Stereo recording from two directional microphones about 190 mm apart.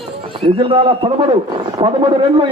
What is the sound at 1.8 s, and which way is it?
Speech, 25° right (ahead or behind).